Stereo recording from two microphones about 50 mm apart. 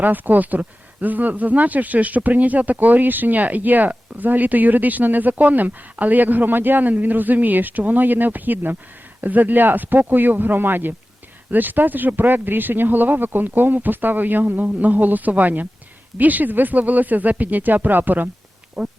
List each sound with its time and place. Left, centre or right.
0.0 s speech: right
18.8 s speech: centre